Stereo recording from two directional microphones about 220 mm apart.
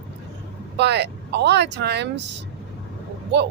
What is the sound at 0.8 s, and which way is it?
Speech, 50° right (ahead or behind).